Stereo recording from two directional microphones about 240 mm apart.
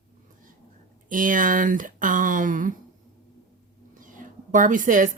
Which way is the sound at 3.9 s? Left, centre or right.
Right.